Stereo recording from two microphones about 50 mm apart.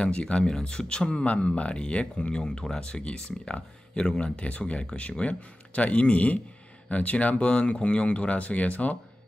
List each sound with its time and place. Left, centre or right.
0.0 s speech: left